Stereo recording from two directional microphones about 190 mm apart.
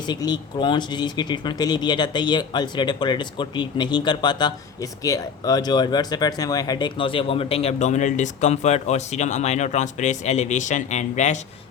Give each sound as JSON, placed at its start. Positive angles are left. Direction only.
{"t": 0.1, "sound": "speech", "side_deg": 20}